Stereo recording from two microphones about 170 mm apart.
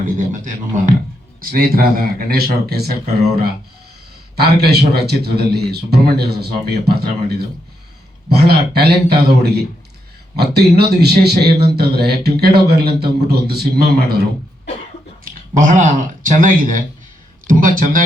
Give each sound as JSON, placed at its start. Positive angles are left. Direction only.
{"t": 0.0, "sound": "speech", "side_deg": -50}
{"t": 1.4, "sound": "a man's voice", "side_deg": -60}
{"t": 4.4, "sound": "a man's voice", "side_deg": -70}
{"t": 8.4, "sound": "a man's voice", "side_deg": -65}
{"t": 15.2, "sound": "speech", "side_deg": -50}